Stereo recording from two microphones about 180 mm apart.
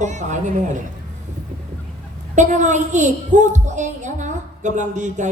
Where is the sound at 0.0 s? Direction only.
40° right (ahead or behind).